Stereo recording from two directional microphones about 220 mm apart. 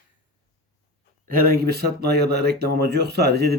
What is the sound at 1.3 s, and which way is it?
Speech, 40° right (ahead or behind).